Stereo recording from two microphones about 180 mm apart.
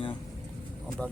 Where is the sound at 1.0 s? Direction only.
5° left (ahead or behind).